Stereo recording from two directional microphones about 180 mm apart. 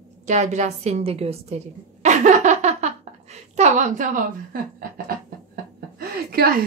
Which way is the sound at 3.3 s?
40° right (ahead or behind).